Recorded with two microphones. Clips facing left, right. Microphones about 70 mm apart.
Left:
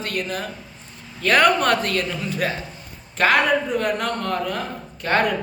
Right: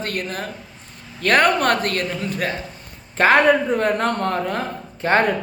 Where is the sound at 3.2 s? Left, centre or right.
Right.